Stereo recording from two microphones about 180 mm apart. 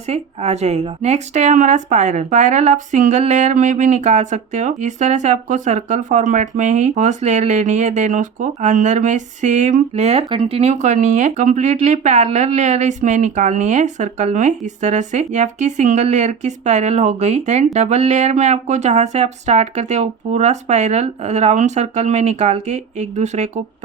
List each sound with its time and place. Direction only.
0.1 s a woman's voice: 40° right (ahead or behind)